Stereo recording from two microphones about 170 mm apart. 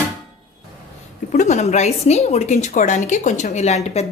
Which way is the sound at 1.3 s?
45° left (ahead or behind).